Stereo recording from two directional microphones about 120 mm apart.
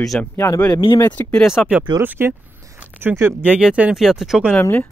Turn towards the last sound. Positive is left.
turn(degrees=-5)  # may be behind; listen again after turning